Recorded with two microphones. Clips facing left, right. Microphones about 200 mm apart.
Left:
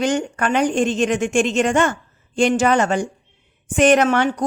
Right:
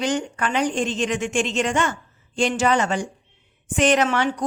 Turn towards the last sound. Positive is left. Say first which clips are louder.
# left 4 dB
turn(degrees=50)  # may be behind; listen again after turning